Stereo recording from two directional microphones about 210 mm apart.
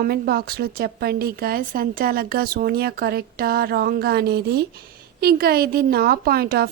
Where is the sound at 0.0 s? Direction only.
45° right (ahead or behind).